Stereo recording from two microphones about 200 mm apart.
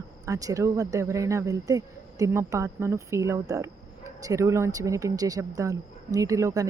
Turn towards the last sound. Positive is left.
turn(degrees=-15)  # may be behind; listen again after turning